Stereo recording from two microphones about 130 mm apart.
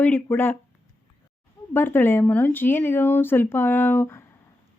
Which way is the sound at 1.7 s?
15° left (ahead or behind).